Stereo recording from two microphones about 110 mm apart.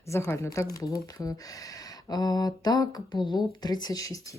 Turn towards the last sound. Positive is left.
turn(degrees=35)  # may be behind; listen again after turning